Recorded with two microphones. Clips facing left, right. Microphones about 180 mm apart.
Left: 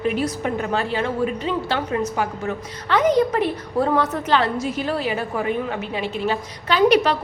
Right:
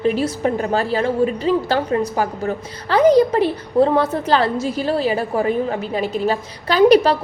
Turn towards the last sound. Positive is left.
turn(degrees=-35)  # may be behind; listen again after turning